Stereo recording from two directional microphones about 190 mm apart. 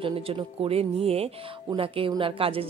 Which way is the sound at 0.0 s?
30° right (ahead or behind).